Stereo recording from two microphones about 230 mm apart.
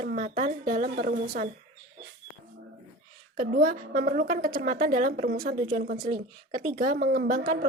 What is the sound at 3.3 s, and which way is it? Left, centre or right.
A woman's voice, right.